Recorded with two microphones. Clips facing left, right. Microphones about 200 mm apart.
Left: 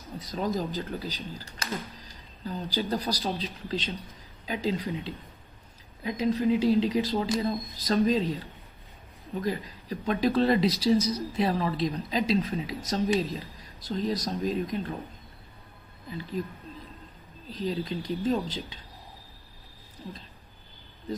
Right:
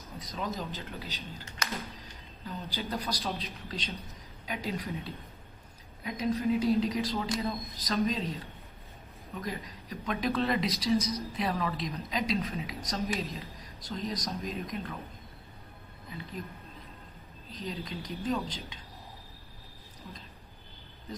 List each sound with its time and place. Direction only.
0.2 s speech: 30° left (ahead or behind)
17.6 s speech: 30° left (ahead or behind)